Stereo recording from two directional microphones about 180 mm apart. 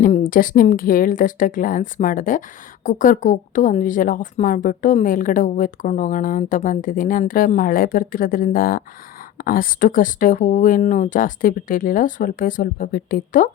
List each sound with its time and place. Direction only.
0.0 s speech: 50° left (ahead or behind)